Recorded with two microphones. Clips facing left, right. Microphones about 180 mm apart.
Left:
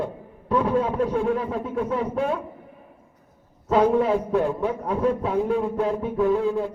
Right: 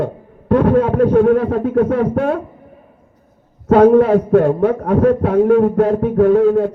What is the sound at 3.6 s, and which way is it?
A man's voice, 65° right (ahead or behind).